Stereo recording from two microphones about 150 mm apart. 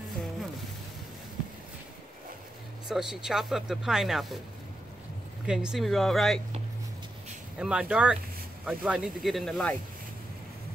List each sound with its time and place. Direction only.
2.9 s speech: 5° right (ahead or behind)
5.5 s speech: 5° right (ahead or behind)
7.5 s speech: 5° right (ahead or behind)